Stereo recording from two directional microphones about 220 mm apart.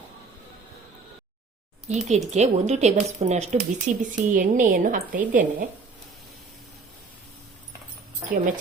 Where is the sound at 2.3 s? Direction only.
30° right (ahead or behind).